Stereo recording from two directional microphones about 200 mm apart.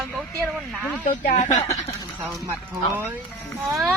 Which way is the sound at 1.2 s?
35° left (ahead or behind).